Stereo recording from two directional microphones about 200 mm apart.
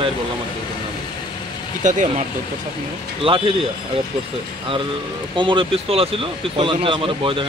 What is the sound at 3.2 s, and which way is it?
Speech, 25° right (ahead or behind).